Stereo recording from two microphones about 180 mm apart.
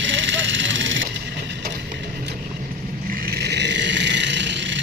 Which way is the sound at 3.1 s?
55° right (ahead or behind).